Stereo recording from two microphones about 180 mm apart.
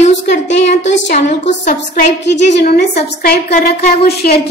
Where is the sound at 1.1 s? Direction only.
40° left (ahead or behind).